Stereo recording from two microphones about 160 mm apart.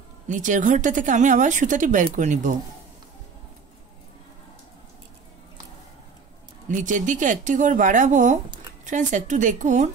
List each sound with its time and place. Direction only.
0.3 s speech: 50° right (ahead or behind)
6.7 s speech: 50° right (ahead or behind)